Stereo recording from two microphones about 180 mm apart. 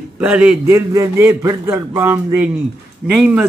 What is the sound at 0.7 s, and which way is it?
A man's voice, 20° right (ahead or behind).